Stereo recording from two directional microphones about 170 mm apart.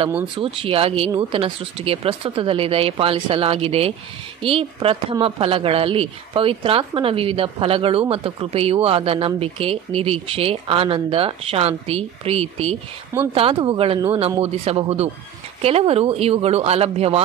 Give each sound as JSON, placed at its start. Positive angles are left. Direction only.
{"t": 0.4, "sound": "speech", "side_deg": -30}